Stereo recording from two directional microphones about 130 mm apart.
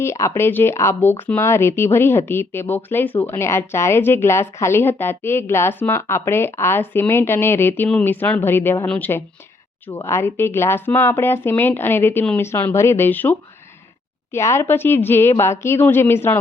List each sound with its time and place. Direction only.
0.0 s speech: 20° left (ahead or behind)
14.3 s speech: 20° left (ahead or behind)